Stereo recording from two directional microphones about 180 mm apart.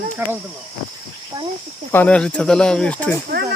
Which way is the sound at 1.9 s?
10° left (ahead or behind).